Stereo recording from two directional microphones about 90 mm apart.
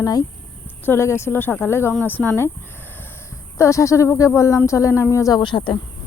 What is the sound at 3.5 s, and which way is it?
A woman's voice, 35° left (ahead or behind).